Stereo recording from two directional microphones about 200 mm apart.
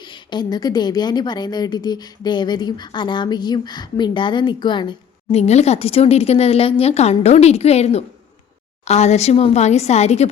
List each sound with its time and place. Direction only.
0.0 s a woman's voice: 20° left (ahead or behind)